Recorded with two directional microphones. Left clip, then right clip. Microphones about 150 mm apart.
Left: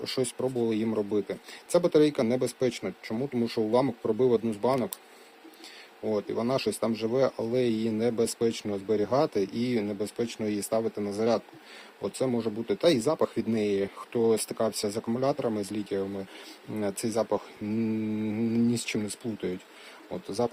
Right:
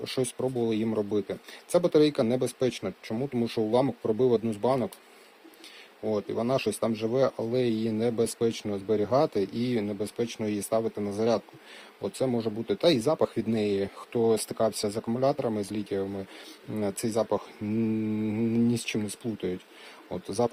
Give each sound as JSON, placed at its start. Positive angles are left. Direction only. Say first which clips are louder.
{"t": 0.0, "sound": "speech", "louder": "even", "side_deg": -5}
{"t": 6.1, "sound": "speech", "louder": "right 1 dB", "side_deg": -5}